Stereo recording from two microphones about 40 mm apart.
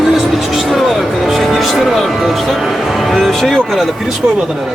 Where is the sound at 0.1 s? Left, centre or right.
Centre.